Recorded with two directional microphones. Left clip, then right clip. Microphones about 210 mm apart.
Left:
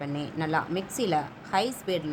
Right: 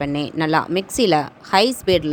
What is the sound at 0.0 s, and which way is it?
A woman's voice, 40° right (ahead or behind).